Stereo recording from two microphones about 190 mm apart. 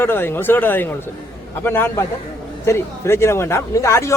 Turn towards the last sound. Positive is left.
turn(degrees=15)  # may be behind; listen again after turning